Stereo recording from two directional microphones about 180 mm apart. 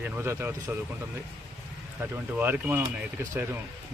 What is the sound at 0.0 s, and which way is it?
Speech, 15° right (ahead or behind).